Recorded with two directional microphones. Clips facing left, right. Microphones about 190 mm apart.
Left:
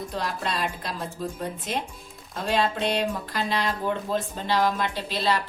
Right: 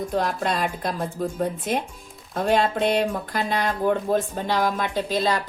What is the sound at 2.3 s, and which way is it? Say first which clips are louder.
A woman's voice: right 4 dB; 50° right (ahead or behind).